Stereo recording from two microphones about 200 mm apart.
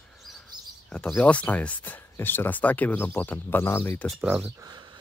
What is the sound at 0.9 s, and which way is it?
Speech, 5° left (ahead or behind).